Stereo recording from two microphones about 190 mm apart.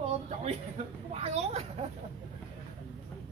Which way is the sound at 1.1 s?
35° right (ahead or behind).